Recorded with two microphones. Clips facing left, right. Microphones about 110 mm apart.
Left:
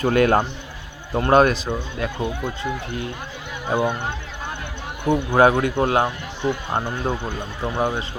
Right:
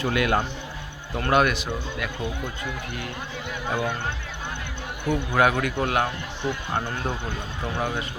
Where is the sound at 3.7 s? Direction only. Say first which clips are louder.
Left 6 dB; 20° left (ahead or behind).